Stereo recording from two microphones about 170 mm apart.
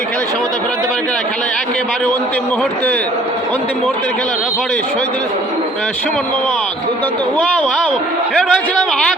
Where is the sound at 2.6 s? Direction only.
10° left (ahead or behind).